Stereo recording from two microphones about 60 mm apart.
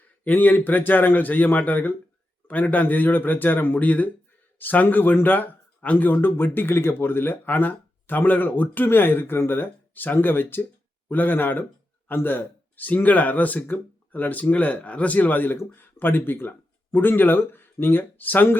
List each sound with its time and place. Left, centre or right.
0.3 s speech: left
6.1 s speech: left